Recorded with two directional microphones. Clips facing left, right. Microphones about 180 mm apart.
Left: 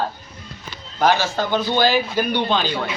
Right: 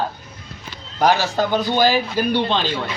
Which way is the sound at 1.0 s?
15° right (ahead or behind).